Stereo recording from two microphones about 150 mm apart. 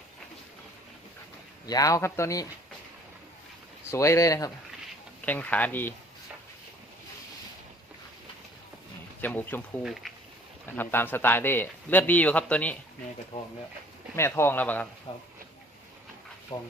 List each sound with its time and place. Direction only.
1.6 s speech: 25° left (ahead or behind)
3.9 s speech: 20° left (ahead or behind)
5.2 s speech: 10° left (ahead or behind)
9.2 s speech: 10° left (ahead or behind)
9.8 s speech: centre (ahead or behind)
10.7 s speech: 15° left (ahead or behind)
14.2 s speech: 15° left (ahead or behind)
15.1 s speech: 35° left (ahead or behind)
16.5 s speech: 30° left (ahead or behind)